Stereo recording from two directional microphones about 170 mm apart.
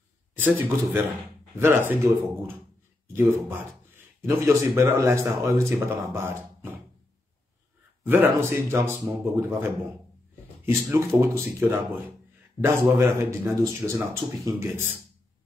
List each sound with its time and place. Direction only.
0.4 s speech: 10° right (ahead or behind)
8.0 s speech: 10° right (ahead or behind)